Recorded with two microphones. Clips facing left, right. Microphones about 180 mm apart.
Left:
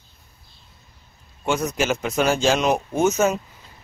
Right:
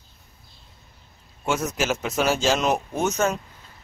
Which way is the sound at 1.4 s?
5° right (ahead or behind).